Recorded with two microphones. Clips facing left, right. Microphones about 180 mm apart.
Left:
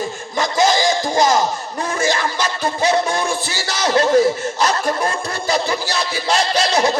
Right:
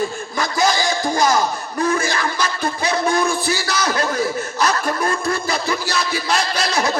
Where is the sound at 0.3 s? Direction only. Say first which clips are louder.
Left 3 dB; 20° left (ahead or behind).